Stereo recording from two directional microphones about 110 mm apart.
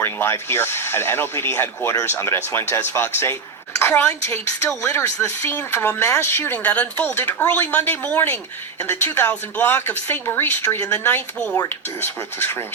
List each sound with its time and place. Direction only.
0.0 s a woman's voice: 25° left (ahead or behind)